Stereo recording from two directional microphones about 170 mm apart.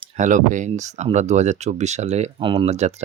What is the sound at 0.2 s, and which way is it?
Speech, 50° right (ahead or behind).